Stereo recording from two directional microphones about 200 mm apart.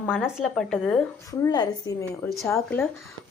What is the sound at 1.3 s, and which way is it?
A woman's voice, 20° left (ahead or behind).